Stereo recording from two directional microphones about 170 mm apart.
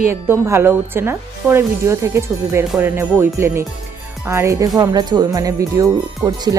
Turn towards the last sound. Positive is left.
turn(degrees=-20)  # may be behind; listen again after turning